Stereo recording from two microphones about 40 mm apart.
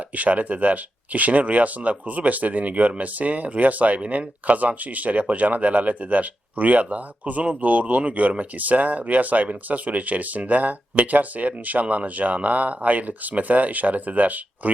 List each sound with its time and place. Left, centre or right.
0.1 s speech: right